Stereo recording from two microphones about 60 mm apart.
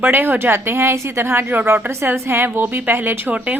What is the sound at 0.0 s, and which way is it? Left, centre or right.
A woman's voice, right.